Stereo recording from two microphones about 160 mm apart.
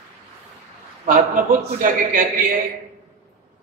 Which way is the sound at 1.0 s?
60° right (ahead or behind).